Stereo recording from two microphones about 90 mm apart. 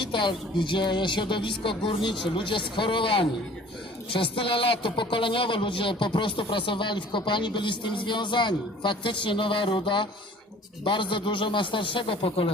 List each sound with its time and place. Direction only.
0.0 s a man's voice: 60° left (ahead or behind)